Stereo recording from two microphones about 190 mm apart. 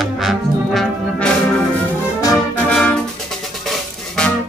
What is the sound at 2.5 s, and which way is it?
Brass instrument, 5° left (ahead or behind).